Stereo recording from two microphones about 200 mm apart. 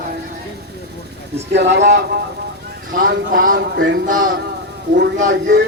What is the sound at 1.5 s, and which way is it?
Speech, 60° right (ahead or behind).